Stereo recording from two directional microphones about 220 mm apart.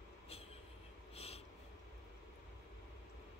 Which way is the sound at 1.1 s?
25° left (ahead or behind).